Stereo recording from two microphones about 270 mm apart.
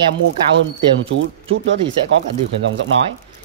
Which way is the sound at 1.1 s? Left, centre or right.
Right.